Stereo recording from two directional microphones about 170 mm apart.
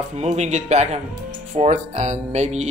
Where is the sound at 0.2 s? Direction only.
40° right (ahead or behind).